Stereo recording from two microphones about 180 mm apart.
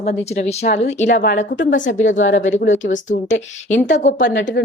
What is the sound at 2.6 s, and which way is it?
Speech, 90° left.